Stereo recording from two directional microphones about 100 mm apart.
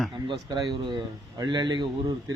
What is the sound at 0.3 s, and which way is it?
A man's voice, 45° right (ahead or behind).